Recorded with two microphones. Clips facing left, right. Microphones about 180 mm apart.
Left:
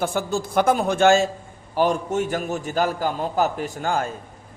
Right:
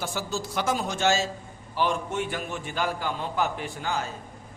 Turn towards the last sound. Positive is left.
turn(degrees=50)  # may be behind; listen again after turning